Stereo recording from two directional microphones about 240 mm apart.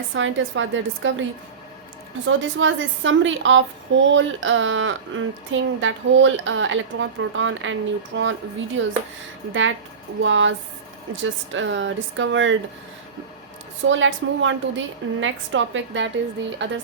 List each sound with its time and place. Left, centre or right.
0.1 s a woman's voice: right
2.2 s a woman's voice: right
13.8 s a woman's voice: right